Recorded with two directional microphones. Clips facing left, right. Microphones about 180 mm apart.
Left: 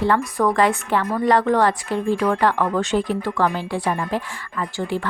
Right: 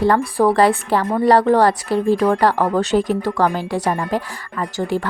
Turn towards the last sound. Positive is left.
turn(degrees=-40)  # may be behind; listen again after turning